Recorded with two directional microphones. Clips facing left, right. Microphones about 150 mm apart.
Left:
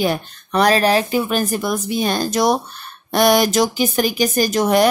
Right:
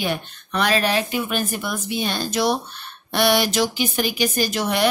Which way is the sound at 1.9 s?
45° left (ahead or behind).